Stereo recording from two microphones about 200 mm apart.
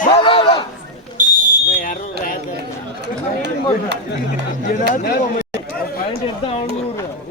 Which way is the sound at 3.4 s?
60° right (ahead or behind).